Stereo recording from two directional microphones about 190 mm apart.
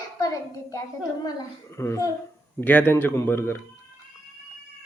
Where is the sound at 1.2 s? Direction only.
15° left (ahead or behind).